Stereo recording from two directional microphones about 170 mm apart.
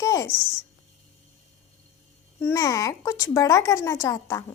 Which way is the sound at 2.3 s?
15° left (ahead or behind).